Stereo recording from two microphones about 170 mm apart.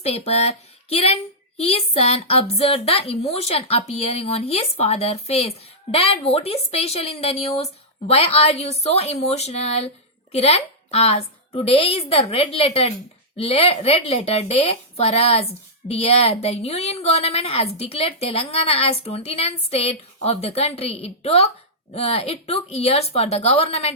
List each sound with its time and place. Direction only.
0.0 s a woman's voice: 40° left (ahead or behind)